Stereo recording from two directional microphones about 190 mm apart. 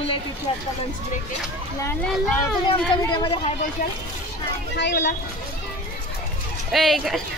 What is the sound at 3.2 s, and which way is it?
Speech, 30° left (ahead or behind).